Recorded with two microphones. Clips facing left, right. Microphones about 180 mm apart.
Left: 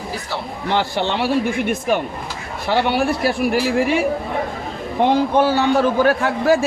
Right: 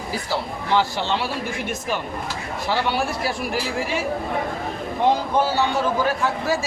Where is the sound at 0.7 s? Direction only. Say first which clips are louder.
Left 2 dB; 60° left (ahead or behind).